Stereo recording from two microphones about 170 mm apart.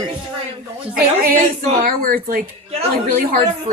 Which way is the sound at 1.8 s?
55° right (ahead or behind).